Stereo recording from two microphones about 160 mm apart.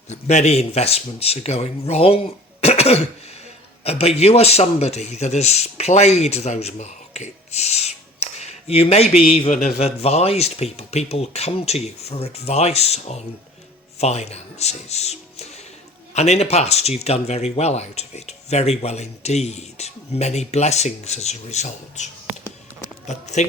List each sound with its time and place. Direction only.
0.1 s a man's voice: 45° left (ahead or behind)
2.6 s cough: 40° left (ahead or behind)
3.8 s a man's voice: 40° left (ahead or behind)